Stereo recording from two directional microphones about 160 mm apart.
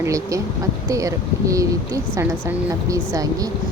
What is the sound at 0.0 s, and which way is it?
Speech, 20° right (ahead or behind).